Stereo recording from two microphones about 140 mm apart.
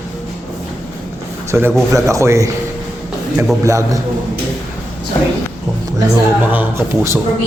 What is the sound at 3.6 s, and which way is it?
Speech, 20° right (ahead or behind).